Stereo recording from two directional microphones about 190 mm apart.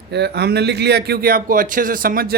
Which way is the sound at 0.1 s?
60° right (ahead or behind).